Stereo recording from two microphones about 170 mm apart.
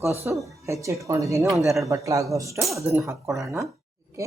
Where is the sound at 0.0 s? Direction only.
15° right (ahead or behind).